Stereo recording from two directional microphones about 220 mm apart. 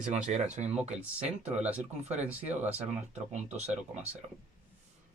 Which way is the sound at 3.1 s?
30° right (ahead or behind).